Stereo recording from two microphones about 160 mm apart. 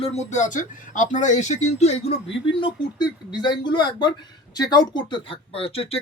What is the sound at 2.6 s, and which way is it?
Speech, 25° left (ahead or behind).